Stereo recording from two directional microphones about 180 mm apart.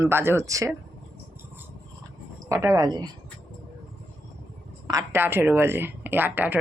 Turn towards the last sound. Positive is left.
turn(degrees=-10)  # may be behind; listen again after turning